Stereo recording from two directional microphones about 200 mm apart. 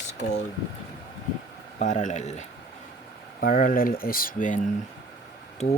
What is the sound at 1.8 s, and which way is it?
Speech, 35° left (ahead or behind).